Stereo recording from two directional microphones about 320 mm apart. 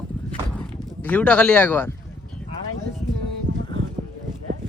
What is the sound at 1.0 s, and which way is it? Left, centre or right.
Speech, centre.